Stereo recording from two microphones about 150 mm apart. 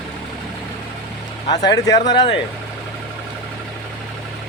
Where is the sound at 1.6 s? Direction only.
25° left (ahead or behind).